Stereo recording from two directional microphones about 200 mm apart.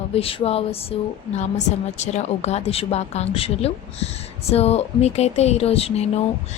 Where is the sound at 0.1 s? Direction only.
30° left (ahead or behind).